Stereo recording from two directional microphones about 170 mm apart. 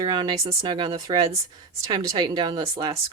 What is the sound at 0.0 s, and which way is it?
Speech, 25° right (ahead or behind).